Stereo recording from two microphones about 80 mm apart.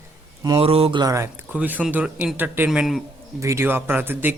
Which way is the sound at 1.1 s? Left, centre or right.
Right.